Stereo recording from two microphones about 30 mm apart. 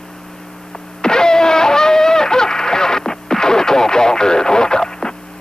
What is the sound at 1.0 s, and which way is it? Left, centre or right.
Vehicle, left.